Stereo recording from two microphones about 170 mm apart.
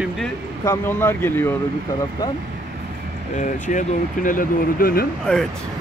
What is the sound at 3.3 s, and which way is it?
Speech, 45° left (ahead or behind).